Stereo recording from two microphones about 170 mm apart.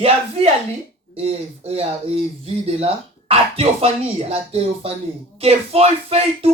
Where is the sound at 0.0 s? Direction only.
35° right (ahead or behind).